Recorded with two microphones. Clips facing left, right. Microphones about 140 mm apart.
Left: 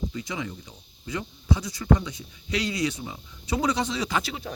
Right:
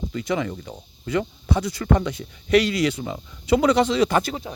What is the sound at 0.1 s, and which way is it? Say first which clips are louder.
Speech: right 8 dB; 60° right (ahead or behind).